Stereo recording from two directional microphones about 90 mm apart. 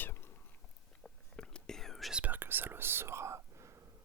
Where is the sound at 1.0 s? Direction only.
10° left (ahead or behind).